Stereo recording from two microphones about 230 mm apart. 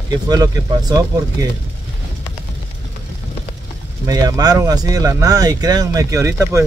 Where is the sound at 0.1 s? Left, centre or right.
Centre.